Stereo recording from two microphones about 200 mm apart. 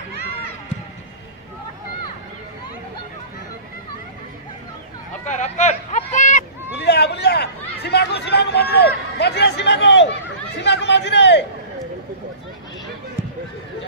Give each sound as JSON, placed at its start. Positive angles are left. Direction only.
{"t": 5.3, "sound": "a sound", "side_deg": 35}
{"t": 6.7, "sound": "chatter", "side_deg": 60}
{"t": 10.6, "sound": "a man's voice", "side_deg": 60}